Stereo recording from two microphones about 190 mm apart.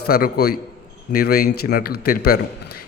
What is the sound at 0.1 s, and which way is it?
A man's voice, 55° left (ahead or behind).